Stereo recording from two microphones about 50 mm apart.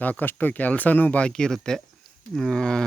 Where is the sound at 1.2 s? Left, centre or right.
Centre.